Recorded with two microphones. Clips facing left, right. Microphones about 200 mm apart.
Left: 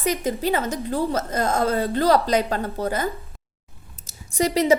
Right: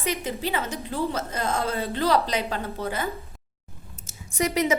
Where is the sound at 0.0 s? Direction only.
45° left (ahead or behind).